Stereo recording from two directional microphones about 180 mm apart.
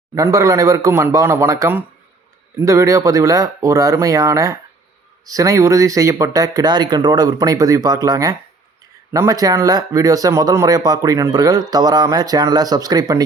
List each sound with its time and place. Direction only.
0.1 s speech: 20° right (ahead or behind)